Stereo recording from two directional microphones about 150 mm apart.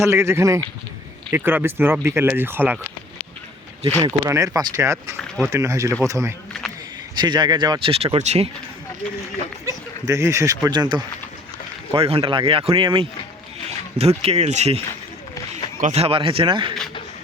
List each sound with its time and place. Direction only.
0.0 s speech: 15° right (ahead or behind)
4.0 s speech: 20° right (ahead or behind)
7.2 s speech: 30° right (ahead or behind)
9.6 s speech: 20° right (ahead or behind)
11.9 s speech: 40° right (ahead or behind)
15.8 s speech: 45° right (ahead or behind)